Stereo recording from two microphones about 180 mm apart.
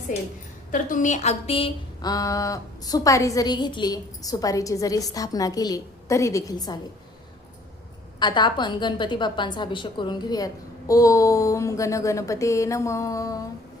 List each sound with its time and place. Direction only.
0.7 s a woman's voice: 45° left (ahead or behind); by 6.7 s 20° left (ahead or behind)
8.2 s a woman's voice: 25° left (ahead or behind)